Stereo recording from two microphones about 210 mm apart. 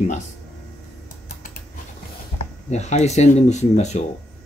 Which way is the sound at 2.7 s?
30° left (ahead or behind).